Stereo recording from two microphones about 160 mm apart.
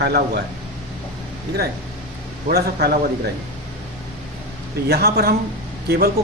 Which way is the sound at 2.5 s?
75° right (ahead or behind).